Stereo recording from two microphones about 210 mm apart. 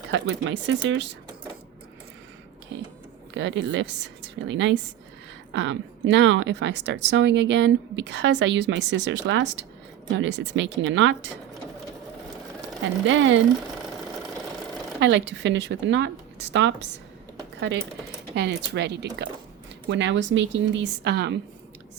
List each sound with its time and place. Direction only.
0.1 s speech: 60° right (ahead or behind)
3.3 s speech: 60° right (ahead or behind)
13.1 s speech: 60° right (ahead or behind)
15.0 s speech: 55° right (ahead or behind)
18.3 s speech: 55° right (ahead or behind)